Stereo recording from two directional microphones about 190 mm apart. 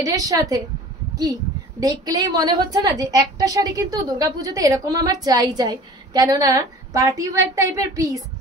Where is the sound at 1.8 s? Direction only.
20° right (ahead or behind).